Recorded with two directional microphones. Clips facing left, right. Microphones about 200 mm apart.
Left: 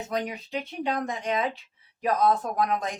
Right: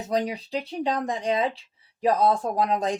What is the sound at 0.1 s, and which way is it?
Speech, 35° right (ahead or behind).